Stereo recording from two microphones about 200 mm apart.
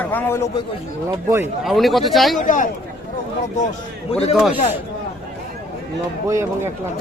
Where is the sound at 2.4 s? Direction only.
40° left (ahead or behind).